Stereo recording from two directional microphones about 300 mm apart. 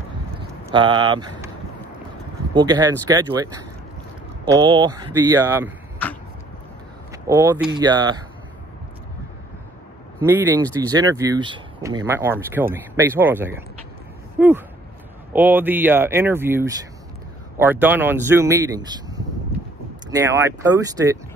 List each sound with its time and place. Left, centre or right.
0.7 s speech: centre
2.5 s speech: centre
7.1 s speech: centre
10.2 s speech: centre